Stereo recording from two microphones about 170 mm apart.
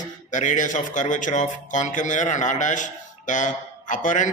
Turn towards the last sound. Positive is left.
turn(degrees=45)  # may be behind; listen again after turning